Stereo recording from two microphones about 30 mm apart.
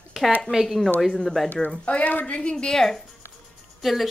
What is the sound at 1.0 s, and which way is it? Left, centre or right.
Speech, centre.